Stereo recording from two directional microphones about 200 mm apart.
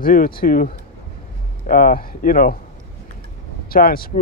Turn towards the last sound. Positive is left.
turn(degrees=45)  # may be behind; listen again after turning